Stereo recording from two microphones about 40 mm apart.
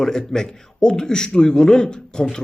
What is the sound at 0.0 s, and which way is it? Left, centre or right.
A man's voice, centre.